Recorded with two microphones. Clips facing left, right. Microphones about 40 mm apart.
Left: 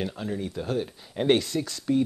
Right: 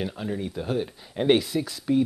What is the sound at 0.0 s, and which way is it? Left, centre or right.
Speech, centre.